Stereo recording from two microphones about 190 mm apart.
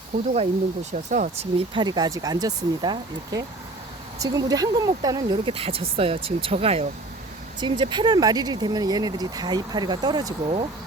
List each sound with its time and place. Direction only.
0.1 s speech: 40° right (ahead or behind)
1.7 s speech: 20° right (ahead or behind)